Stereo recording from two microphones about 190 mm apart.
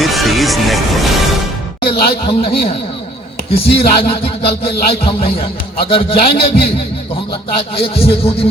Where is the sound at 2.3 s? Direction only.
30° left (ahead or behind).